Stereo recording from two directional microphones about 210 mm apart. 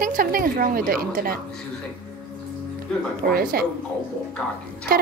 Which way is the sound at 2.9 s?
5° left (ahead or behind).